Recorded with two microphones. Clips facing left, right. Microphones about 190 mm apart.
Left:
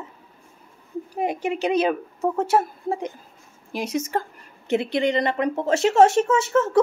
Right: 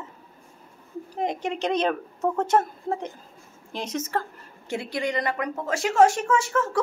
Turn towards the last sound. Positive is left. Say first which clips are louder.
# left 5 dB
turn(degrees=25)  # may be behind; listen again after turning